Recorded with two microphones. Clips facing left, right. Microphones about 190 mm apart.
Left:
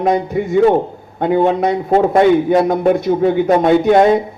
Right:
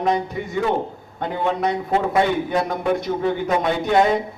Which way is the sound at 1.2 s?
50° left (ahead or behind).